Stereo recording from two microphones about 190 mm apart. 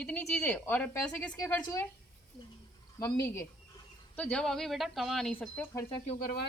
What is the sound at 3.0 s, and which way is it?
A woman's voice, 15° left (ahead or behind).